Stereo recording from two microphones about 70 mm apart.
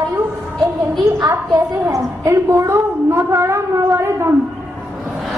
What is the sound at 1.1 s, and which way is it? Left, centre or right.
A woman's voice, right.